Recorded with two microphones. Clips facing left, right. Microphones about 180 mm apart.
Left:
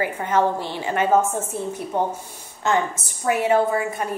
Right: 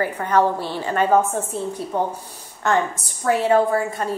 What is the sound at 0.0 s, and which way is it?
A woman's voice, 15° left (ahead or behind).